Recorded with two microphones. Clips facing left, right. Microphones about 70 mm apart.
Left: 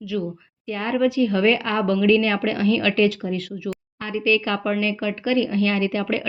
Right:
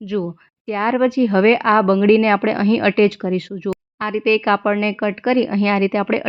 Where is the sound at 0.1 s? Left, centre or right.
Right.